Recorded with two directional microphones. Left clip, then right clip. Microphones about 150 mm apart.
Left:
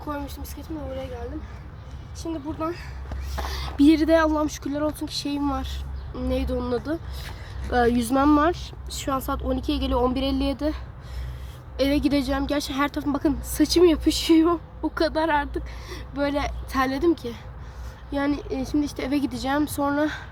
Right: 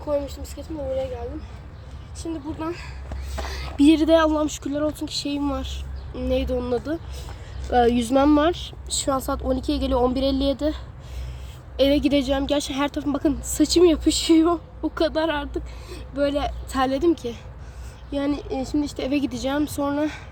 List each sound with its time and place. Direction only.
0.1 s speech: 15° left (ahead or behind)
2.1 s speech: 15° left (ahead or behind)
3.4 s a sound: 20° left (ahead or behind)
3.9 s speech: 5° right (ahead or behind)
11.8 s speech: 5° right (ahead or behind)